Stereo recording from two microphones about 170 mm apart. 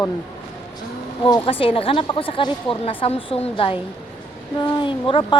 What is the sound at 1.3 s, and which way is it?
A woman's voice, 25° left (ahead or behind).